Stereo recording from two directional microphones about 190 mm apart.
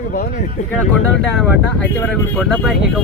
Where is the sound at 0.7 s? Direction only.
5° left (ahead or behind).